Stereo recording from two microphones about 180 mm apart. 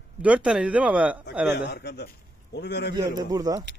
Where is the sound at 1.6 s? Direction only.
70° left (ahead or behind).